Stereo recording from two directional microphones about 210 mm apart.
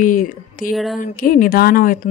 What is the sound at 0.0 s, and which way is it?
A man's voice, 40° left (ahead or behind).